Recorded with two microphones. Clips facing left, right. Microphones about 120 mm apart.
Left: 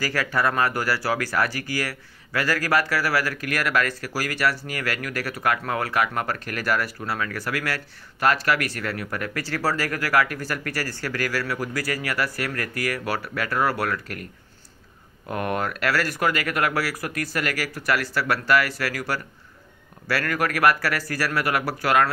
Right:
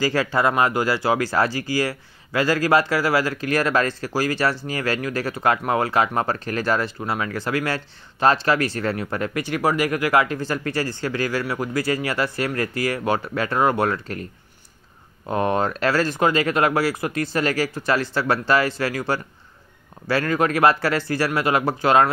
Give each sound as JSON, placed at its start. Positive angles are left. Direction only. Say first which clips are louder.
{"t": 0.0, "sound": "speech", "louder": "right 4 dB", "side_deg": -25}
{"t": 15.2, "sound": "speech", "louder": "right 5 dB", "side_deg": -25}